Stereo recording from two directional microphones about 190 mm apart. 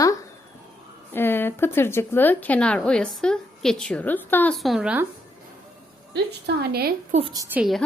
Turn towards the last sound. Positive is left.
turn(degrees=0)  # may be behind; listen again after turning